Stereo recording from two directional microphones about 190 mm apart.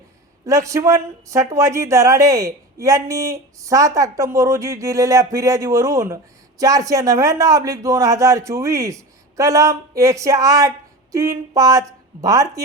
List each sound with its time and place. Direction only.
0.4 s speech: 15° right (ahead or behind)